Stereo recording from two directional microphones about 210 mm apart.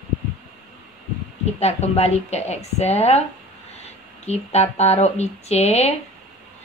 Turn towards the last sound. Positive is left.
turn(degrees=30)  # may be behind; listen again after turning